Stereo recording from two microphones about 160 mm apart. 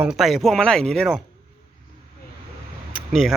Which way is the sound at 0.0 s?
5° right (ahead or behind).